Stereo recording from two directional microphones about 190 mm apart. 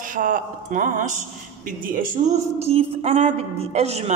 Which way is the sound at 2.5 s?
35° right (ahead or behind).